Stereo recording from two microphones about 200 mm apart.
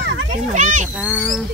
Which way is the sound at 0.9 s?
5° right (ahead or behind).